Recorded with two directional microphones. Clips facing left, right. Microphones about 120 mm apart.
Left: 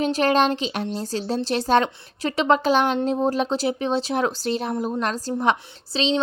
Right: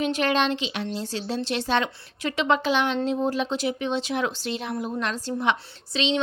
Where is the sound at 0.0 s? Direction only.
40° left (ahead or behind).